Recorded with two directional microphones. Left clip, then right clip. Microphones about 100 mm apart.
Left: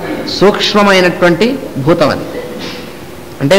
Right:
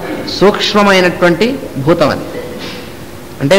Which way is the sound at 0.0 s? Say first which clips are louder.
Left 1 dB; 35° right (ahead or behind).